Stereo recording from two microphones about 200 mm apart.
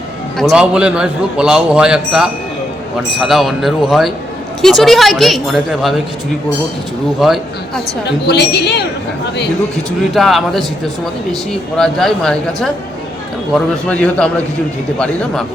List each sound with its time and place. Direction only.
0.5 s a man's voice: 5° right (ahead or behind)
7.2 s a man's voice: centre (ahead or behind)
8.0 s speech: 55° left (ahead or behind)
10.2 s a man's voice: centre (ahead or behind)
11.8 s a man's voice: centre (ahead or behind)
13.8 s a man's voice: 5° left (ahead or behind)